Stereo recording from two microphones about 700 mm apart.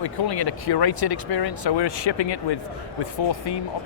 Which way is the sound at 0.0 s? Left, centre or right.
Left.